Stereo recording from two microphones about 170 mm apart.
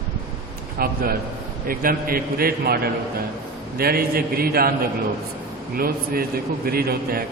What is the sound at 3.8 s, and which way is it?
A man's voice, 65° right (ahead or behind).